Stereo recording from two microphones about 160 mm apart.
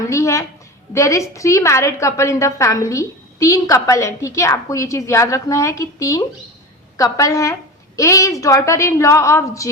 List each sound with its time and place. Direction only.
0.1 s a woman's voice: 20° left (ahead or behind)